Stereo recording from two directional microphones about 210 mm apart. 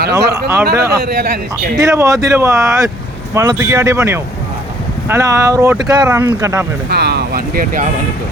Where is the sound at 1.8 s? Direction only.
15° right (ahead or behind).